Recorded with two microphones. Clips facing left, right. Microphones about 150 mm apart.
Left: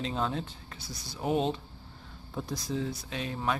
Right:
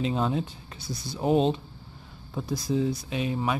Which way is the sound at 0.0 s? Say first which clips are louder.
Right 5 dB; 10° right (ahead or behind).